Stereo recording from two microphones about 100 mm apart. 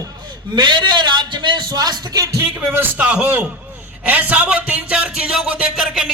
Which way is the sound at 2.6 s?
15° right (ahead or behind).